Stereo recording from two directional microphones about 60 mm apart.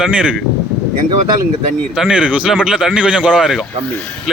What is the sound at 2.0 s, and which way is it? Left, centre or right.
Speech, centre.